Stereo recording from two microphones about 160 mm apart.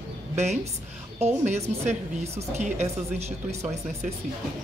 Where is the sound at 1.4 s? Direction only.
45° right (ahead or behind).